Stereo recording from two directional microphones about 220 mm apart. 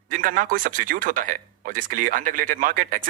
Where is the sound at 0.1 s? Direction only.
40° right (ahead or behind).